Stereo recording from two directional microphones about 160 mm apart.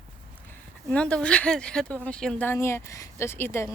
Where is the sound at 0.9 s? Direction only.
5° left (ahead or behind).